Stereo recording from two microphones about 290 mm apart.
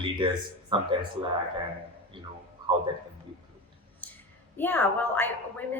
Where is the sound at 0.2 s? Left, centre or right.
Centre.